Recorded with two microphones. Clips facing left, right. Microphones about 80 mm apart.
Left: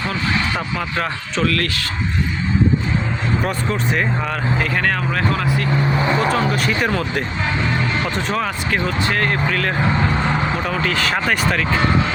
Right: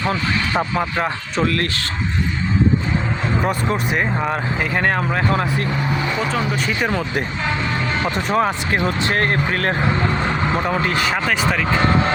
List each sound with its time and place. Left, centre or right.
0.0 s speech: right
3.4 s speech: centre
6.0 s speech: left
8.4 s speech: right
9.1 s speech: right
11.1 s speech: centre